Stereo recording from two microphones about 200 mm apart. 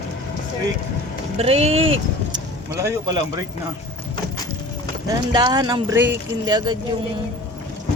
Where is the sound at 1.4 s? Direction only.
30° right (ahead or behind).